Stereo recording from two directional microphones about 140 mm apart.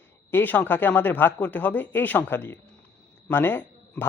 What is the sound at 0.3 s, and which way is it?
A man's voice, 15° left (ahead or behind).